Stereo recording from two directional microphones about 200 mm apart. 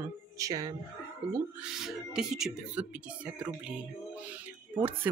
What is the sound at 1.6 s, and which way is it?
Speech, centre (ahead or behind).